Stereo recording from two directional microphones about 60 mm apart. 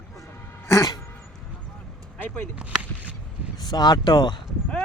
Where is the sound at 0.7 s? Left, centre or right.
Left.